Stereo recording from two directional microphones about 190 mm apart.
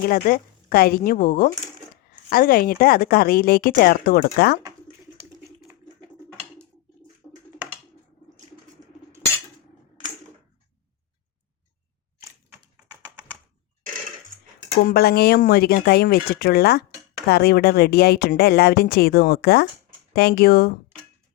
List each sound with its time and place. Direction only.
0.0 s a woman's voice: 50° left (ahead or behind)
14.8 s speech: 55° left (ahead or behind)